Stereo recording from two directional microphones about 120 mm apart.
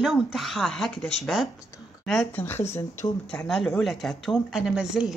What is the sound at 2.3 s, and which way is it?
Speech, 20° left (ahead or behind).